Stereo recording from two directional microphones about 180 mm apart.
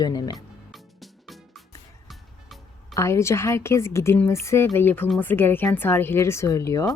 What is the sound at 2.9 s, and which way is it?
Speech, 15° left (ahead or behind).